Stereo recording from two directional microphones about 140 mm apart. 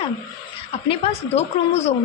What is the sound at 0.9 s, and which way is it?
Speech, 45° left (ahead or behind).